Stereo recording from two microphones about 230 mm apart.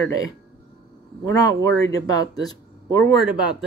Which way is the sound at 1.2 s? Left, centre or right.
Centre.